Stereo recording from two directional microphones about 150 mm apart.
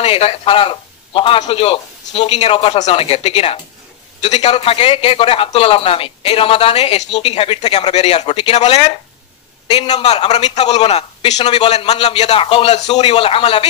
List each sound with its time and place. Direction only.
0.0 s a man's voice: 40° left (ahead or behind)
10.0 s a man's voice: 45° left (ahead or behind)